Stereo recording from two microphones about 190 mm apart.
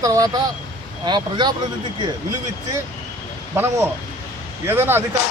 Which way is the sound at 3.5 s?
10° right (ahead or behind).